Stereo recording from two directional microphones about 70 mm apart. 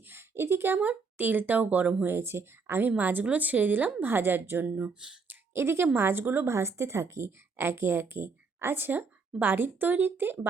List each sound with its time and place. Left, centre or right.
0.1 s a woman's voice: right
2.1 s a woman's voice: right
5.5 s a woman's voice: right